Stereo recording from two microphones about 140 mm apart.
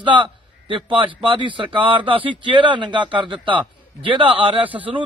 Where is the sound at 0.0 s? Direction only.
35° right (ahead or behind).